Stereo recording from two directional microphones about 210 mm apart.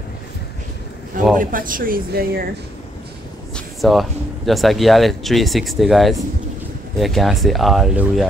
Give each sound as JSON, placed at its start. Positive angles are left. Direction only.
{"t": 1.3, "sound": "speech", "side_deg": -40}
{"t": 3.5, "sound": "speech", "side_deg": 0}